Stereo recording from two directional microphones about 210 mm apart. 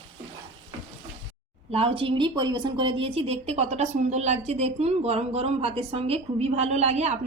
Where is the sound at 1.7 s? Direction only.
25° right (ahead or behind).